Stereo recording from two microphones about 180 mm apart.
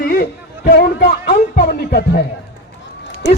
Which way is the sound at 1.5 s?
55° left (ahead or behind).